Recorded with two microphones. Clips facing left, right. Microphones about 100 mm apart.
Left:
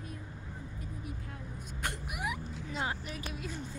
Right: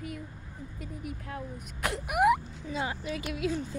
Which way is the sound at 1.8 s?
70° right (ahead or behind).